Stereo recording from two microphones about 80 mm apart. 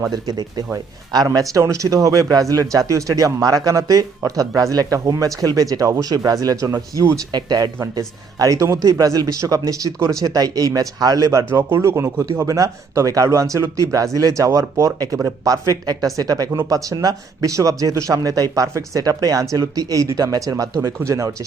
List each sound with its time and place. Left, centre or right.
0.1 s speech: right
7.3 s speech: right
7.8 s speech: right
11.9 s speech: right
12.2 s speech: right